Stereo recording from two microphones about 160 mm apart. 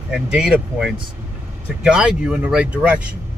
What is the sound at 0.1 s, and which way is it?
Speech, 5° right (ahead or behind).